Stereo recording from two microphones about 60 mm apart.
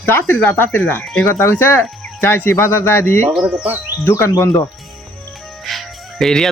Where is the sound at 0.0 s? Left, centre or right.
Left.